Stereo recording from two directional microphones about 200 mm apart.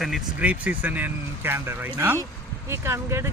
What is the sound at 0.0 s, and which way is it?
Speech, 5° right (ahead or behind).